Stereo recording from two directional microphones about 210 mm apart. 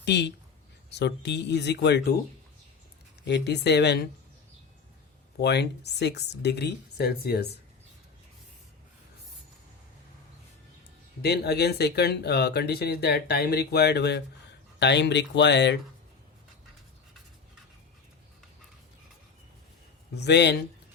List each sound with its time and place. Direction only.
0.0 s speech: 55° left (ahead or behind)
3.2 s speech: 55° left (ahead or behind)
5.4 s speech: 50° left (ahead or behind)
11.2 s speech: 50° left (ahead or behind)
20.1 s speech: 55° left (ahead or behind)